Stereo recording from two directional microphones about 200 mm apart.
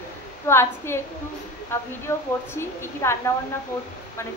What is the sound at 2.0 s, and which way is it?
A woman's voice, 15° left (ahead or behind).